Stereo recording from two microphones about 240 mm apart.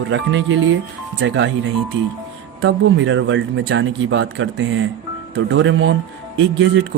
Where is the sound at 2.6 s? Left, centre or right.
Right.